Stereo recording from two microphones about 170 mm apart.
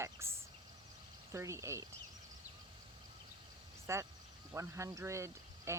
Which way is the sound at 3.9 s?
15° right (ahead or behind).